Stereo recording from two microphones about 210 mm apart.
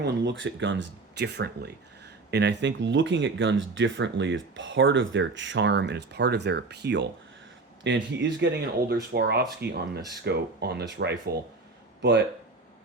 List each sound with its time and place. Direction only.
0.0 s speech: 60° right (ahead or behind)